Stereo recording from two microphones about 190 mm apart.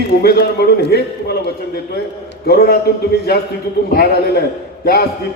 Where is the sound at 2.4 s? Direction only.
55° left (ahead or behind).